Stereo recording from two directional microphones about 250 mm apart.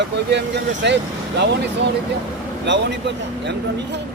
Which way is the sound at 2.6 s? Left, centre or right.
Right.